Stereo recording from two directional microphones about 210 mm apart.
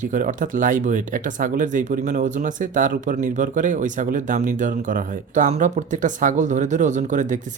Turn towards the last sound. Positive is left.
turn(degrees=-35)  # may be behind; listen again after turning